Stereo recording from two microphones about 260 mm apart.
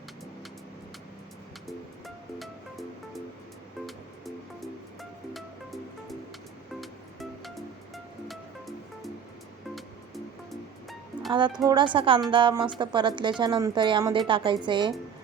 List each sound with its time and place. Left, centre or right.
1.6 s music: centre
5.3 s music: centre
11.3 s a woman's voice: centre